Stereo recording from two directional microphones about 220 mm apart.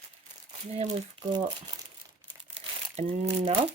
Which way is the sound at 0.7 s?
25° right (ahead or behind).